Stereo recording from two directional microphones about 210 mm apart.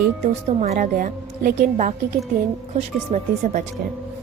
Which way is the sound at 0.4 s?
30° right (ahead or behind).